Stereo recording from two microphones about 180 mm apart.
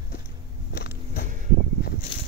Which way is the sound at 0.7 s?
60° left (ahead or behind).